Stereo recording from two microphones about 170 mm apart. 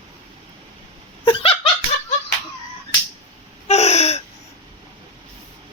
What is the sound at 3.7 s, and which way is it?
Gasp, 40° left (ahead or behind).